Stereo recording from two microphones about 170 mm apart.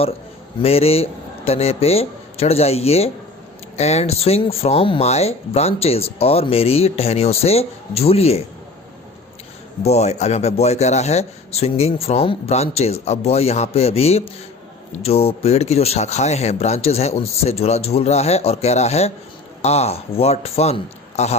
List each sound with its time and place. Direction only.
0.6 s speech: 35° left (ahead or behind)
9.8 s speech: 40° left (ahead or behind)